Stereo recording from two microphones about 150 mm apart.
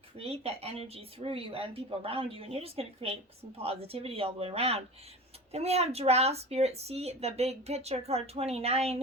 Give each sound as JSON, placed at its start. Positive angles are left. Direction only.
{"t": 0.2, "sound": "a woman's voice", "side_deg": -40}